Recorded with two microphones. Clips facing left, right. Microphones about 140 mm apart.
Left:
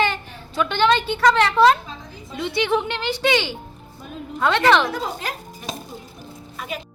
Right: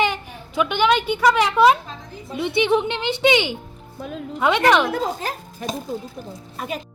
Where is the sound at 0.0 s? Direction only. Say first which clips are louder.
Even; 15° right (ahead or behind).